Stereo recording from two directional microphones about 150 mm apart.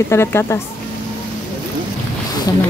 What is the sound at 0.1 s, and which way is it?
Speech, 15° left (ahead or behind).